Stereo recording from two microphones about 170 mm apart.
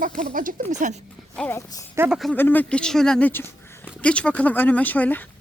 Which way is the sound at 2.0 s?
5° right (ahead or behind).